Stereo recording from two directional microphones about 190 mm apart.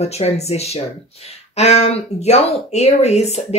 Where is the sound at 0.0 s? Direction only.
35° left (ahead or behind).